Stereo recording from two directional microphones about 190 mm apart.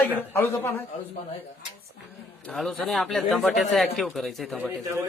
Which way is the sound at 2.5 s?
5° left (ahead or behind).